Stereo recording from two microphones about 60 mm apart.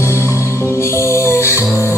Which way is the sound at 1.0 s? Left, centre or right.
Left.